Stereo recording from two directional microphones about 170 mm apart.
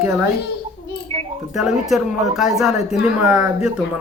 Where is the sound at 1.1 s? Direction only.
35° right (ahead or behind).